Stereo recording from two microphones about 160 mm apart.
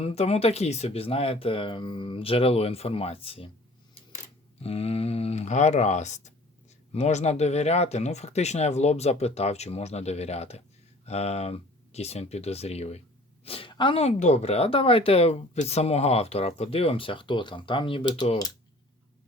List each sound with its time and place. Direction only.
0.0 s speech: 40° left (ahead or behind)
4.6 s speech: 40° left (ahead or behind)